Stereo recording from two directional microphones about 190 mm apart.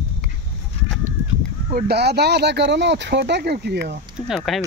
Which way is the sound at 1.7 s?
60° right (ahead or behind).